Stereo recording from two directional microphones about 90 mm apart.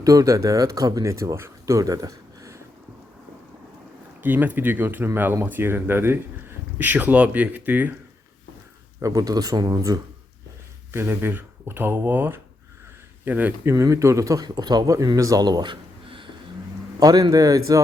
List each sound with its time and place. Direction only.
0.0 s speech: 40° right (ahead or behind)
4.2 s speech: 20° right (ahead or behind)
9.0 s speech: 40° right (ahead or behind)
10.9 s speech: 25° right (ahead or behind)
13.7 s speech: 35° right (ahead or behind); by 16.3 s 70° right (ahead or behind)
17.0 s a man's voice: 45° right (ahead or behind)